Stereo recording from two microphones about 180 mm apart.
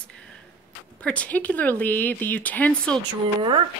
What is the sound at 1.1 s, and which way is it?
Speech, 10° left (ahead or behind).